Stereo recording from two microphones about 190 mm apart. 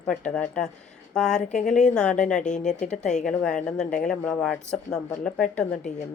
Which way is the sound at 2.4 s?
40° left (ahead or behind).